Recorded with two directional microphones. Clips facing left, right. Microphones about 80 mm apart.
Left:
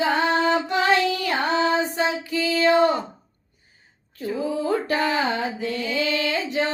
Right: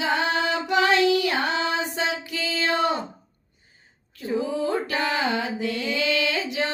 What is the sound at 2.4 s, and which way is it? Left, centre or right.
Music, right.